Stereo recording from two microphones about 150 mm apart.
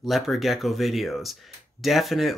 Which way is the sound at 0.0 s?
Centre (ahead or behind).